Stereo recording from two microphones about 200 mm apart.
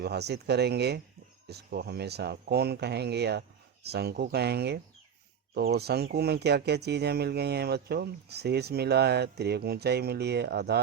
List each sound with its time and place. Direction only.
0.0 s speech: 55° right (ahead or behind)